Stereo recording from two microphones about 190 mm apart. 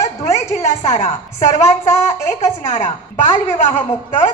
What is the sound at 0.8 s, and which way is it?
Speech, 35° left (ahead or behind).